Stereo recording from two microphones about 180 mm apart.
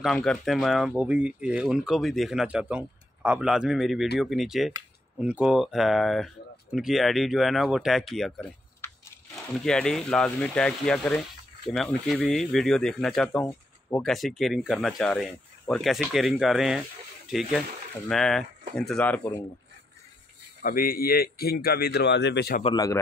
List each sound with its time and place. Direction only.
0.0 s speech: 5° left (ahead or behind)
9.7 s speech: 5° left (ahead or behind)
20.6 s a man's voice: 50° left (ahead or behind); by 22.6 s 70° left (ahead or behind)